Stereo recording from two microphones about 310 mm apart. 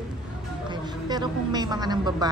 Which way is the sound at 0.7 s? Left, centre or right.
Centre.